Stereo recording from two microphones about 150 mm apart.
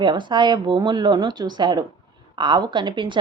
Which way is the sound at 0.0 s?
30° right (ahead or behind).